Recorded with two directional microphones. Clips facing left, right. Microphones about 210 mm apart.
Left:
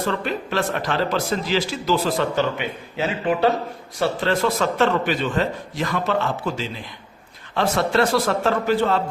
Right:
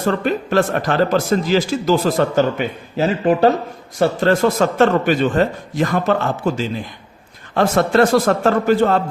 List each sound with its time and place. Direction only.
0.0 s a man's voice: 45° right (ahead or behind)